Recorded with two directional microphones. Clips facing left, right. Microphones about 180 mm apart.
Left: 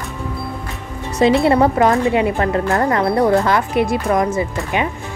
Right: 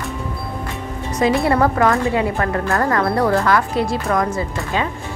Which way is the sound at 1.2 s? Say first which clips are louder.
Left 3 dB; 25° left (ahead or behind).